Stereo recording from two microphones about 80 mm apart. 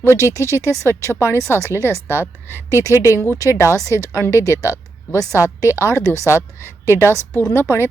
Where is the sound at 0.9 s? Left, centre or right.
Right.